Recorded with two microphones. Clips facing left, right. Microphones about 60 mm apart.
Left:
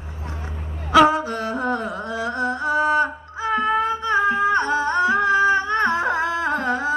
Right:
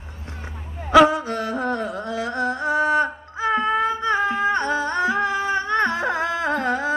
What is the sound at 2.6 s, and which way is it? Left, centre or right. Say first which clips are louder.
Music: left 1 dB; right.